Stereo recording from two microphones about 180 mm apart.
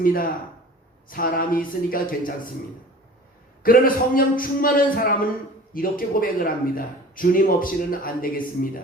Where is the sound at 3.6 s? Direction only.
50° left (ahead or behind).